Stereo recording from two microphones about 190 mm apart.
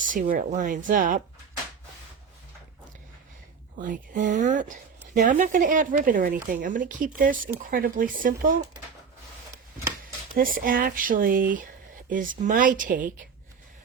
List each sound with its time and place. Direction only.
0.0 s speech: 45° right (ahead or behind)
3.8 s speech: 45° right (ahead or behind)
10.0 s speech: 45° right (ahead or behind)